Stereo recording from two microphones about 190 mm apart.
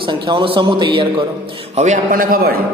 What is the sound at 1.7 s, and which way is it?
Speech, 40° right (ahead or behind).